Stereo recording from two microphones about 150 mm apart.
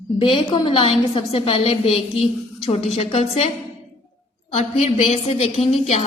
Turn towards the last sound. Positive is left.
turn(degrees=45)  # may be behind; listen again after turning